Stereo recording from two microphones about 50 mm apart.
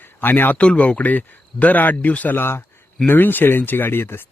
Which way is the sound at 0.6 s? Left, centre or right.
Left.